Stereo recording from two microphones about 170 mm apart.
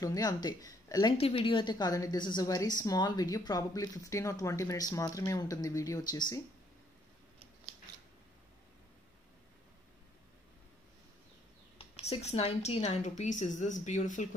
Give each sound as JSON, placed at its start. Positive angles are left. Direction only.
{"t": 0.0, "sound": "a woman's voice", "side_deg": 20}
{"t": 1.1, "sound": "a woman's voice", "side_deg": 35}
{"t": 11.8, "sound": "a woman's voice", "side_deg": 35}